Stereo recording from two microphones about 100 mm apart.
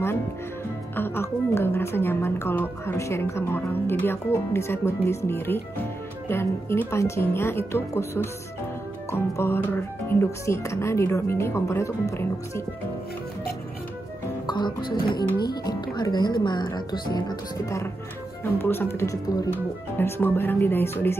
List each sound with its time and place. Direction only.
0.9 s a woman's voice: 20° left (ahead or behind)
14.4 s speech: 50° left (ahead or behind)
18.4 s a woman's voice: 20° left (ahead or behind)
20.0 s a woman's voice: 20° left (ahead or behind)